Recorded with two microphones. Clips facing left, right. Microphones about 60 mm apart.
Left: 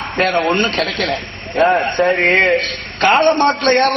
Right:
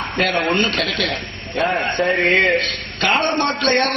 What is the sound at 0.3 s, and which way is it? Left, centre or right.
A man's voice, left.